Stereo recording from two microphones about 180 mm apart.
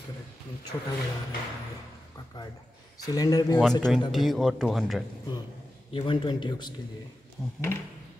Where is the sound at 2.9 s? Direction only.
20° left (ahead or behind).